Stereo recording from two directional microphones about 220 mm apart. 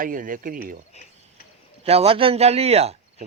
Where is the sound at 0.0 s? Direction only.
40° right (ahead or behind).